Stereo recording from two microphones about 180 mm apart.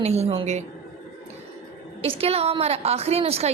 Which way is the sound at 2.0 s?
30° right (ahead or behind).